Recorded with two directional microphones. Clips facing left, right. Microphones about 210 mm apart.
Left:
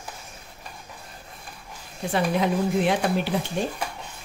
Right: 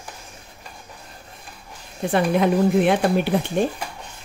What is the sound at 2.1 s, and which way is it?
Speech, 55° right (ahead or behind).